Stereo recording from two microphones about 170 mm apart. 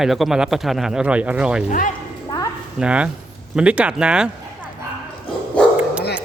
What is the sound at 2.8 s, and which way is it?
Speech, 5° right (ahead or behind).